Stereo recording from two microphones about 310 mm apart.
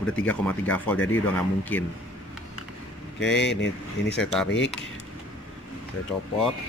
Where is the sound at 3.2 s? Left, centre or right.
Left.